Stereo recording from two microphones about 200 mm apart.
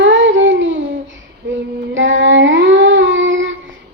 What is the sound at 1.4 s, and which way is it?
Female singing, 70° right (ahead or behind).